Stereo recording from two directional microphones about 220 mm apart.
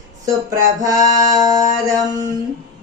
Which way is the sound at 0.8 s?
15° right (ahead or behind).